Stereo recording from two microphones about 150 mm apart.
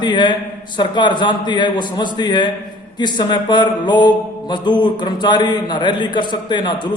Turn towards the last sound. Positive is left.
turn(degrees=30)  # may be behind; listen again after turning